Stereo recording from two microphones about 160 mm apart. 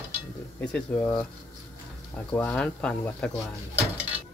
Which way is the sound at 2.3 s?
10° left (ahead or behind).